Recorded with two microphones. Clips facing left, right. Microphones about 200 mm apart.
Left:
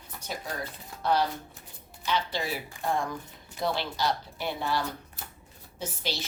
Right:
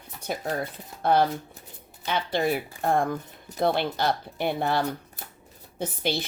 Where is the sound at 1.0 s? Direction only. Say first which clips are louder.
Right 5 dB; 55° right (ahead or behind).